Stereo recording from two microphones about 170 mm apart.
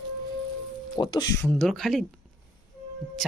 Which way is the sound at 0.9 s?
25° left (ahead or behind).